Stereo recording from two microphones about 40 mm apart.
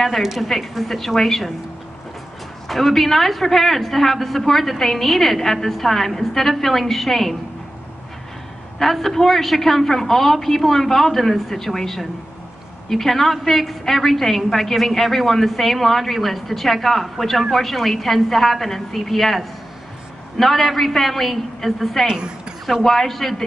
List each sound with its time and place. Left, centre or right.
0.0 s a woman's voice: centre
2.7 s a woman's voice: centre
8.7 s a woman's voice: centre
22.0 s a woman's voice: centre
22.7 s a woman's voice: centre